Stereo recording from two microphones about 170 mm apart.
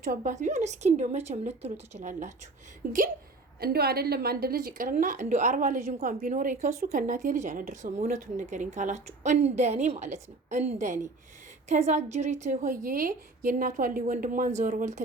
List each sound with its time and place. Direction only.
0.0 s a woman's voice: 50° right (ahead or behind)
2.8 s a woman's voice: 60° right (ahead or behind); by 15.0 s 45° right (ahead or behind)